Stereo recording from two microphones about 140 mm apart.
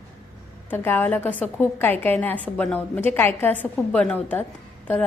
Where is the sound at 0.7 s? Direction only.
15° left (ahead or behind).